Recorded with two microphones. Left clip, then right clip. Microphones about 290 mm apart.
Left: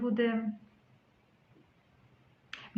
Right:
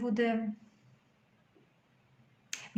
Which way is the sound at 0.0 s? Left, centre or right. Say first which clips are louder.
Even; right.